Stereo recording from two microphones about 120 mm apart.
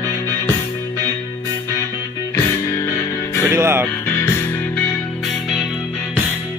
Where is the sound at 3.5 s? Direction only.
20° right (ahead or behind).